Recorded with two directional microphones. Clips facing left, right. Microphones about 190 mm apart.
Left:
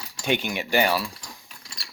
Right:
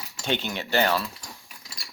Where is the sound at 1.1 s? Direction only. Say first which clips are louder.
Even; 5° right (ahead or behind).